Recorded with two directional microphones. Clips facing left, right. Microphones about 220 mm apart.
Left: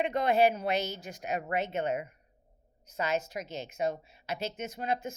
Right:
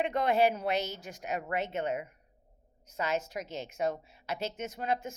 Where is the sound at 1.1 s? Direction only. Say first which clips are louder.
Left 1 dB; 20° left (ahead or behind).